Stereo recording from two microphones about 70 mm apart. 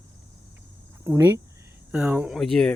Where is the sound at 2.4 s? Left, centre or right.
Centre.